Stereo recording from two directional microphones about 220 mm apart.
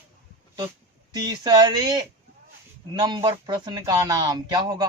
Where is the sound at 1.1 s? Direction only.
20° right (ahead or behind).